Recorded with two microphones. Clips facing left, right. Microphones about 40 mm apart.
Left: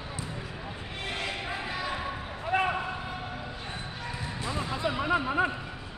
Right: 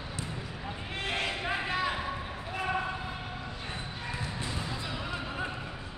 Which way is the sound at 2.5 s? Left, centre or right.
Left.